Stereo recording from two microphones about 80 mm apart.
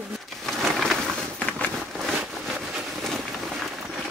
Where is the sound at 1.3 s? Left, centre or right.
Centre.